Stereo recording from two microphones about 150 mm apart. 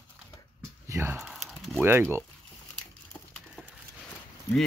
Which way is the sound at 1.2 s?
Centre (ahead or behind).